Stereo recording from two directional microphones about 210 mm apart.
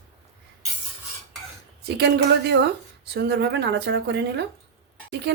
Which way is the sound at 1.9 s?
55° right (ahead or behind).